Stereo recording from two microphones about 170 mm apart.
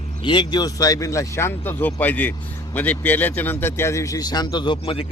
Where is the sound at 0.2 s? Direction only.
30° left (ahead or behind).